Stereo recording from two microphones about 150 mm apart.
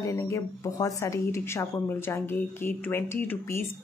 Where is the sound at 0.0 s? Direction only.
20° left (ahead or behind).